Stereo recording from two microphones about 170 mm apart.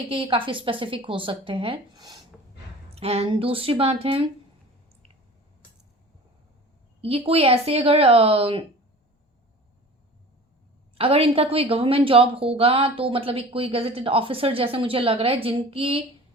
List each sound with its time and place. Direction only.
0.1 s a woman's voice: 30° right (ahead or behind)
2.9 s a woman's voice: 35° right (ahead or behind)
7.0 s a woman's voice: 35° right (ahead or behind)
10.9 s a woman's voice: 35° right (ahead or behind)